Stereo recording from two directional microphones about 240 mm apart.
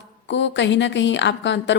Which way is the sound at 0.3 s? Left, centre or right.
Left.